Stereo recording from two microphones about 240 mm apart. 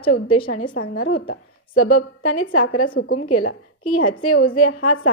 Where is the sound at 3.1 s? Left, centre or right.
Left.